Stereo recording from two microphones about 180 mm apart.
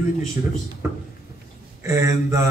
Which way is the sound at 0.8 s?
15° right (ahead or behind).